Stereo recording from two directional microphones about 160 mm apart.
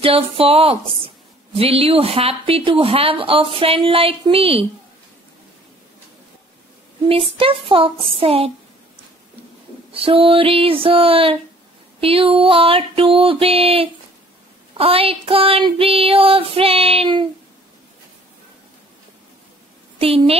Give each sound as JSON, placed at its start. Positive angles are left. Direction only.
{"t": 0.4, "sound": "a woman's voice", "side_deg": -35}
{"t": 7.1, "sound": "a woman's voice", "side_deg": -35}
{"t": 9.9, "sound": "a woman's voice", "side_deg": -35}
{"t": 20.0, "sound": "a woman's voice", "side_deg": -35}